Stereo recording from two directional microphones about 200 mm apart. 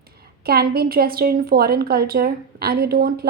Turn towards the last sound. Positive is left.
turn(degrees=-50)  # may be behind; listen again after turning